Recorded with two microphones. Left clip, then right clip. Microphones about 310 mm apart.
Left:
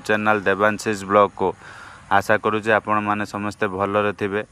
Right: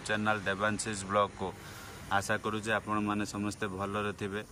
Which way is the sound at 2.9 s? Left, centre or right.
Left.